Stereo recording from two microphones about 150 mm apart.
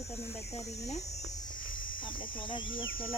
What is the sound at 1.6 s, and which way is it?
Cricket, 65° left (ahead or behind).